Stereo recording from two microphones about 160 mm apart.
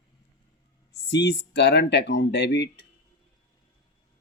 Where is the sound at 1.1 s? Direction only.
90° left.